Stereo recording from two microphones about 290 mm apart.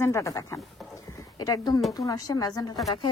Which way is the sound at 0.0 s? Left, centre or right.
Centre.